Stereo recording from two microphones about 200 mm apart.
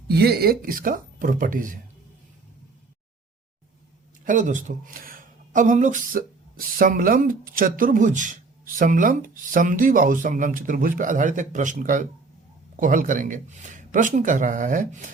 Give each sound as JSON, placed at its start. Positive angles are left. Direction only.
{"t": 0.1, "sound": "speech", "side_deg": -55}
{"t": 4.3, "sound": "speech", "side_deg": -40}